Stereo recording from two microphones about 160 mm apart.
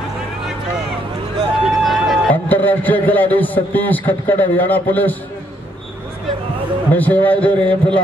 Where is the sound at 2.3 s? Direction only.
10° left (ahead or behind).